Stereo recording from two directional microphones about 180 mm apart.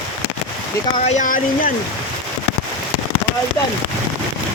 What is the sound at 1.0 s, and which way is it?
Speech, 40° left (ahead or behind).